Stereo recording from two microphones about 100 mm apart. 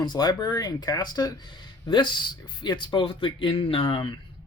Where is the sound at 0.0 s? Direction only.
45° left (ahead or behind); by 4.1 s 60° left (ahead or behind).